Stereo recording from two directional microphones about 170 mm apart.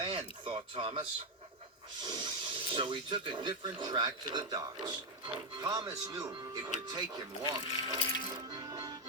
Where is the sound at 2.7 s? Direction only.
30° right (ahead or behind).